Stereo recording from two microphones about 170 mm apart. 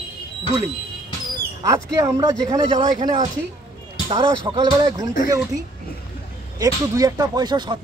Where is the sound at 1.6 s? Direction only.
20° right (ahead or behind).